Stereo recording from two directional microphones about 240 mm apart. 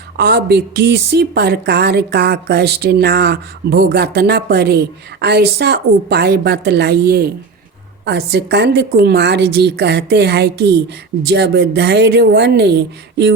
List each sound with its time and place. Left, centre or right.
0.2 s a woman's voice: right